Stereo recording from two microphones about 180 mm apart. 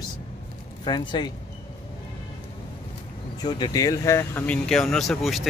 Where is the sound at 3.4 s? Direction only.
25° left (ahead or behind); by 5.5 s centre (ahead or behind).